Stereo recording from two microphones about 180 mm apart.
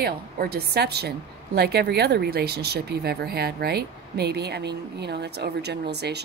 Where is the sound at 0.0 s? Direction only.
60° right (ahead or behind).